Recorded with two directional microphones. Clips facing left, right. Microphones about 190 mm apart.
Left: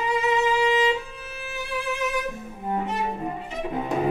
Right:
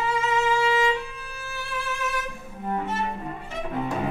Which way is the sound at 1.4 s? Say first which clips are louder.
Left 4 dB; 20° left (ahead or behind).